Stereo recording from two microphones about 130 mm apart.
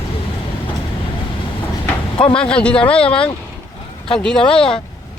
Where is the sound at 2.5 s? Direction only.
10° left (ahead or behind).